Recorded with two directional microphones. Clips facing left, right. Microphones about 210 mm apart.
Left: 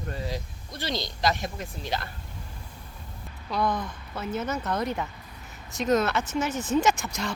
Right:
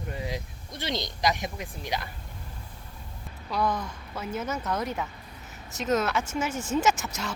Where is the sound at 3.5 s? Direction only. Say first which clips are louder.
Left 1 dB; 10° right (ahead or behind).